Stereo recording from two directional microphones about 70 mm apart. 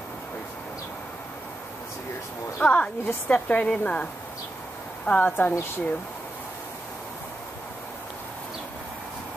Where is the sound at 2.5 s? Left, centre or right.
Centre.